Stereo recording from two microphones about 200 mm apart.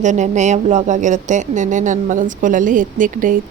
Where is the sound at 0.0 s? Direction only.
35° right (ahead or behind).